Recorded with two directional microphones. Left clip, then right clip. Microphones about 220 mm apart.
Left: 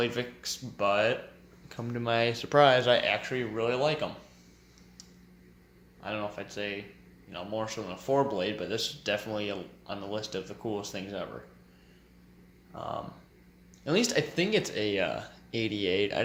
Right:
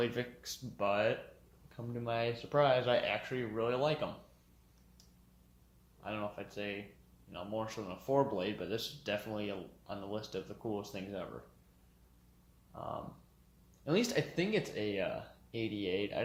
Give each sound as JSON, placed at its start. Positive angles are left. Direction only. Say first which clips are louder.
{"t": 0.0, "sound": "speech", "louder": "left 5 dB", "side_deg": 10}
{"t": 1.7, "sound": "speech", "louder": "left 8 dB", "side_deg": 40}
{"t": 3.0, "sound": "speech", "louder": "left 7 dB", "side_deg": 20}
{"t": 6.0, "sound": "speech", "louder": "left 6 dB", "side_deg": 5}
{"t": 12.7, "sound": "speech", "louder": "left 6 dB", "side_deg": 10}